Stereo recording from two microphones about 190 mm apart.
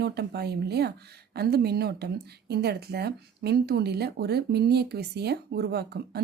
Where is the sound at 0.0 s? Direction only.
60° right (ahead or behind).